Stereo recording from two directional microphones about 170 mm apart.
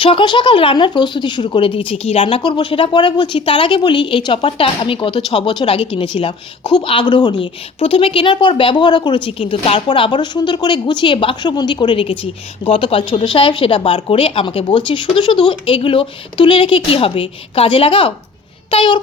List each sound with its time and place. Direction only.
0.0 s speech: 30° left (ahead or behind)